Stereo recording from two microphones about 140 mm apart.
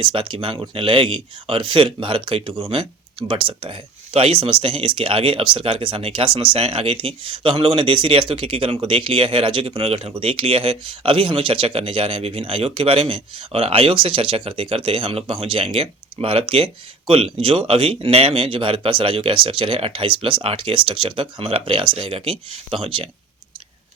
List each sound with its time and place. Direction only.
0.0 s speech: 35° right (ahead or behind)